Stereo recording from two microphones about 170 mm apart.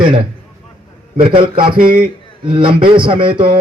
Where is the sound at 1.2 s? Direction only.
30° right (ahead or behind).